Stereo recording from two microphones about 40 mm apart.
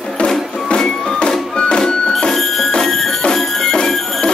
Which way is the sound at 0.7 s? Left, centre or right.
Centre.